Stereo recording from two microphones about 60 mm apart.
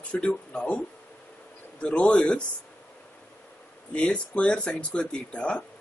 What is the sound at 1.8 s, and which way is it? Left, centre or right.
Speech, centre.